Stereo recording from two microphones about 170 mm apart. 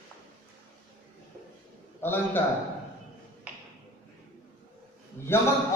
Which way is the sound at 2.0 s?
15° left (ahead or behind).